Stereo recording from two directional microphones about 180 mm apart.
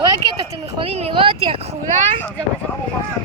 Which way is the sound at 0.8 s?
35° right (ahead or behind).